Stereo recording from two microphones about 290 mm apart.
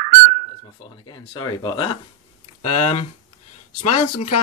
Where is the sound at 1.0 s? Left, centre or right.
Centre.